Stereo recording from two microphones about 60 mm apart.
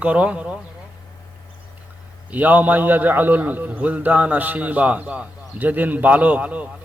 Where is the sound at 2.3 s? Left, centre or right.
Right.